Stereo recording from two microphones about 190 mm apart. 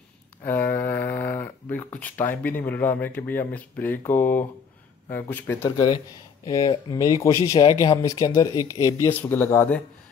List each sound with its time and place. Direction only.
0.5 s speech: 10° left (ahead or behind)